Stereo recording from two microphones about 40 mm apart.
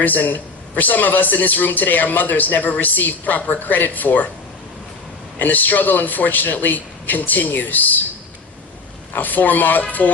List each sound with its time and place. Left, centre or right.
0.0 s a man's voice: left
5.4 s a man's voice: left
9.1 s a man's voice: left